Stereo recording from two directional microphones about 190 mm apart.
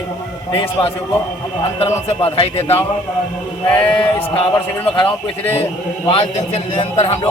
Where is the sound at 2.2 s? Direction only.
30° left (ahead or behind).